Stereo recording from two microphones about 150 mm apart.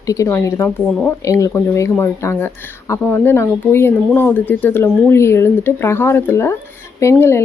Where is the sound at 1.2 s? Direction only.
20° left (ahead or behind).